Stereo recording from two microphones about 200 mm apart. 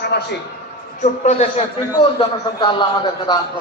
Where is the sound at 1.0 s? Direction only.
35° left (ahead or behind).